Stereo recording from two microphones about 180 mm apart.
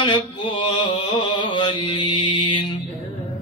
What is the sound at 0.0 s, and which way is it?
Mantra, 25° left (ahead or behind).